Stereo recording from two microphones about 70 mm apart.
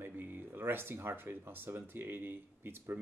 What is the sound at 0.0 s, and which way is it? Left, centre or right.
Speech, right.